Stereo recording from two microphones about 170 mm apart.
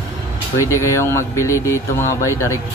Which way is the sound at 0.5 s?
15° left (ahead or behind).